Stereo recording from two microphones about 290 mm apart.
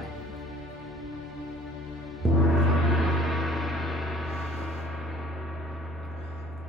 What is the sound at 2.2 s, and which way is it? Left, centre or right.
Gong, centre.